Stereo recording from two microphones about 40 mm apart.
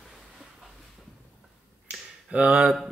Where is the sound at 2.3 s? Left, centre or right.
Right.